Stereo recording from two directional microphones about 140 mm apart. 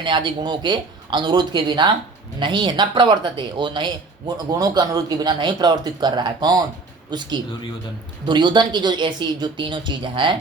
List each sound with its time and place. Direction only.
0.0 s speech: 35° right (ahead or behind)
8.3 s speech: 30° right (ahead or behind)